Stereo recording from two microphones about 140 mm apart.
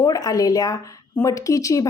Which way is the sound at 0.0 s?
25° left (ahead or behind).